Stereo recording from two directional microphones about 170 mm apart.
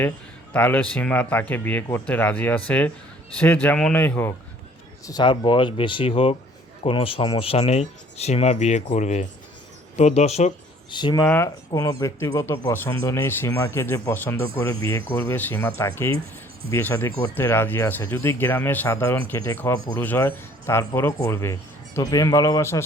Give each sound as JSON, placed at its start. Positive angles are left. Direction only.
{"t": 0.5, "sound": "speech", "side_deg": 10}
{"t": 5.0, "sound": "speech", "side_deg": 25}
{"t": 10.9, "sound": "speech", "side_deg": 25}